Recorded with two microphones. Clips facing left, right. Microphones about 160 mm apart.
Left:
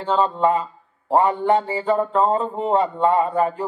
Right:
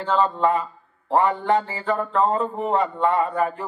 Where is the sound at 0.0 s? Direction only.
25° left (ahead or behind).